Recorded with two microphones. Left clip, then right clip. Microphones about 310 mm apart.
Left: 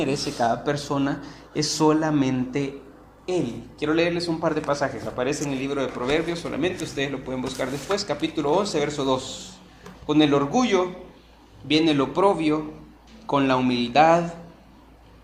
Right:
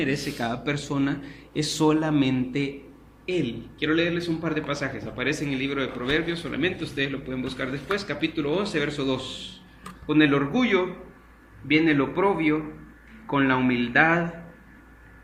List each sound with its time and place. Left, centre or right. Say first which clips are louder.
0.3 s a man's voice: left 6 dB; centre